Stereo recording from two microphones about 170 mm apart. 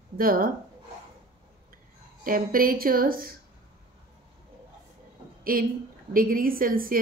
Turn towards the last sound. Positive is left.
turn(degrees=-55)  # may be behind; listen again after turning